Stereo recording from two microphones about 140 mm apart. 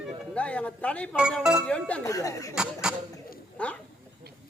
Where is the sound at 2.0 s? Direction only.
25° left (ahead or behind).